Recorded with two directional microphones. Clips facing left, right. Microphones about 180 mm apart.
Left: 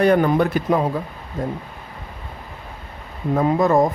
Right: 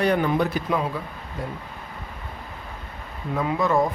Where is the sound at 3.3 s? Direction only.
45° left (ahead or behind).